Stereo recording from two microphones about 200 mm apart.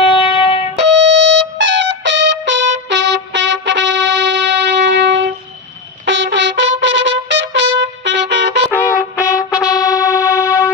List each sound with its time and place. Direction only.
0.0 s music: 25° left (ahead or behind)
0.7 s music: 60° right (ahead or behind)
8.7 s music: 5° right (ahead or behind)
9.6 s music: 15° left (ahead or behind)